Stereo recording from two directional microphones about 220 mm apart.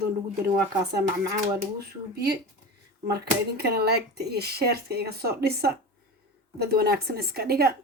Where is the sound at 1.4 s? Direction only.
45° right (ahead or behind).